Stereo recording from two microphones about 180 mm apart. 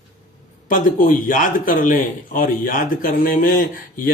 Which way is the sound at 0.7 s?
50° left (ahead or behind).